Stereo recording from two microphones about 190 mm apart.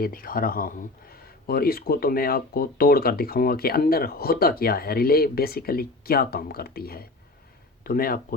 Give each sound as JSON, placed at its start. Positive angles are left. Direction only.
{"t": 0.0, "sound": "speech", "side_deg": 50}